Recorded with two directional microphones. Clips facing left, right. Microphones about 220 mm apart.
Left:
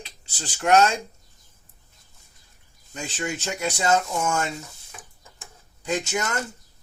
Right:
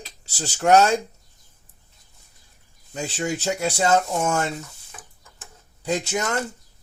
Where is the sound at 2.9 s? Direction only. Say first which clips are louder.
Right 4 dB; 40° right (ahead or behind).